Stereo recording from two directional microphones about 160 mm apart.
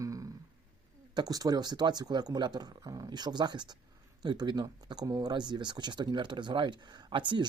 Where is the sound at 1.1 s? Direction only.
25° right (ahead or behind).